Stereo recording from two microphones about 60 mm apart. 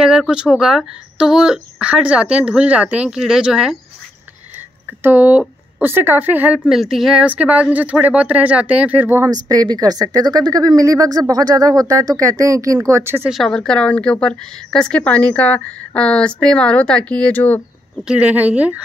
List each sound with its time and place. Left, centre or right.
0.3 s speech: centre
3.1 s speech: centre
5.0 s a woman's voice: right
6.7 s speech: centre
7.2 s speech: right
9.2 s speech: right
13.4 s a woman's voice: centre
17.3 s a woman's voice: left
18.0 s speech: centre